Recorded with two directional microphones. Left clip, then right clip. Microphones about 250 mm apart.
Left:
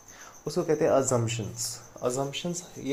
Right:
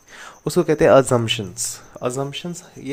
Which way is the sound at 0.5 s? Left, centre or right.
Right.